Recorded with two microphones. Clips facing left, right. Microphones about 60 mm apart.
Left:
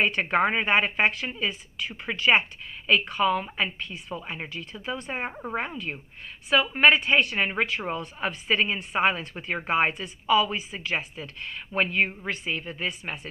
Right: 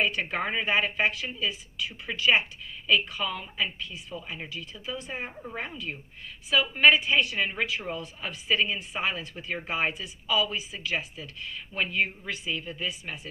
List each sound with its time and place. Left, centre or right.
0.0 s a woman's voice: left